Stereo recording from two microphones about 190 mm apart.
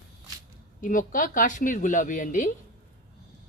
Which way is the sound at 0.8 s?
45° left (ahead or behind).